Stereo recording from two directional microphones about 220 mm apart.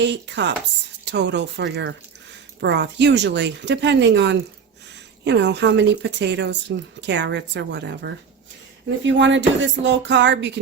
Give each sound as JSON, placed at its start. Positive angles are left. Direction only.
{"t": 0.0, "sound": "speech", "side_deg": -55}